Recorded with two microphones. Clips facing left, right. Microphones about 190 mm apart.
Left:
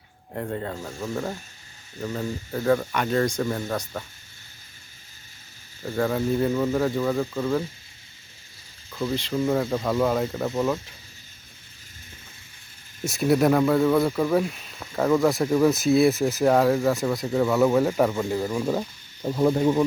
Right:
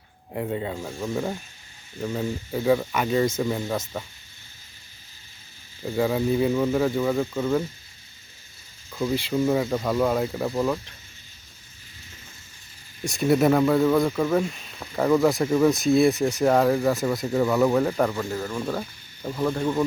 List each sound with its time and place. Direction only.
0.3 s speech: 10° right (ahead or behind)
5.8 s speech: 10° right (ahead or behind)
8.9 s speech: 10° right (ahead or behind)
13.1 s speech: centre (ahead or behind)
18.2 s speech: 15° left (ahead or behind)